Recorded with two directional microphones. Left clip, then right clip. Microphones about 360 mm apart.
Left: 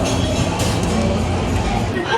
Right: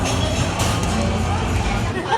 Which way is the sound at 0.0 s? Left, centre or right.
Centre.